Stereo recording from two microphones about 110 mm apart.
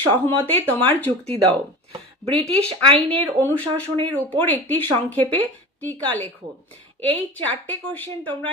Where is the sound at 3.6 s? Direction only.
45° right (ahead or behind).